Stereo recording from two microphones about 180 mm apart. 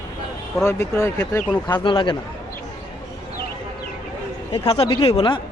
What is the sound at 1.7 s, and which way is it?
Speech, 25° left (ahead or behind).